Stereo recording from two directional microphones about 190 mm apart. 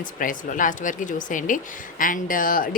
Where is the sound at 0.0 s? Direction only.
45° left (ahead or behind).